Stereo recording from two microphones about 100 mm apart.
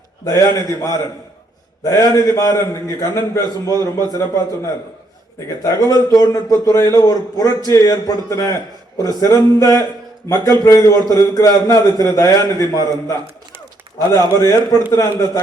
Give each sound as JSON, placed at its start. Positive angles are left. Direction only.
{"t": 0.3, "sound": "a man's voice", "side_deg": 35}
{"t": 1.8, "sound": "a man's voice", "side_deg": 35}